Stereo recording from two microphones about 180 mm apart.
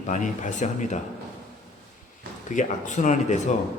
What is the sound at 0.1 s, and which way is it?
Speech, 45° left (ahead or behind).